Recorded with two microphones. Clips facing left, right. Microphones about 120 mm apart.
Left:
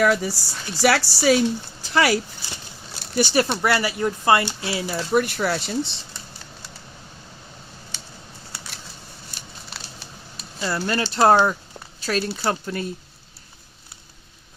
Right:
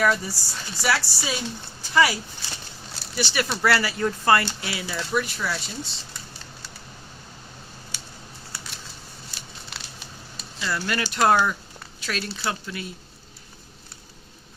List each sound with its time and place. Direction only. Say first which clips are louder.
0.2 s speech: left 5 dB; 80° left
1.9 s speech: left 1 dB; 65° left (ahead or behind)
3.0 s a sound: left 7 dB; 50° left (ahead or behind)
3.6 s speech: left 1 dB; 20° left (ahead or behind); by 5.2 s 35° left (ahead or behind)
5.2 s speech: left 6 dB; 60° left (ahead or behind)
10.6 s speech: left 3 dB; 30° left (ahead or behind)